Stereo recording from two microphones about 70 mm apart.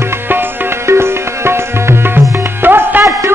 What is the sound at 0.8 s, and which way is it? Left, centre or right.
Music, right.